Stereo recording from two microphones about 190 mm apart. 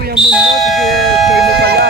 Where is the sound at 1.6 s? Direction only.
55° right (ahead or behind).